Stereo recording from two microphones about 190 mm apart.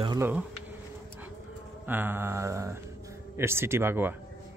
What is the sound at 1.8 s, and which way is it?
Speech, 10° right (ahead or behind).